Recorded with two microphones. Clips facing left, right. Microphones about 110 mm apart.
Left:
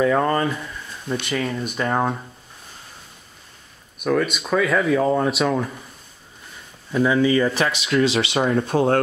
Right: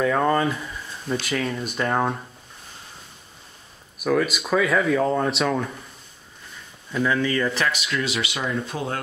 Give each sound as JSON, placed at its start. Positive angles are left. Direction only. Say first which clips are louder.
{"t": 0.0, "sound": "speech", "louder": "left 2 dB", "side_deg": 0}
{"t": 4.0, "sound": "speech", "louder": "left 1 dB", "side_deg": 0}
{"t": 6.9, "sound": "speech", "louder": "left 5 dB", "side_deg": 15}
{"t": 8.5, "sound": "speech", "louder": "left 10 dB", "side_deg": 70}